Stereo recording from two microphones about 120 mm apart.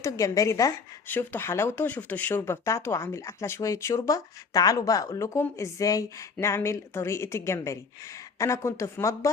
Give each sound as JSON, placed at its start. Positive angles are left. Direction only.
{"t": 0.0, "sound": "a woman's voice", "side_deg": 25}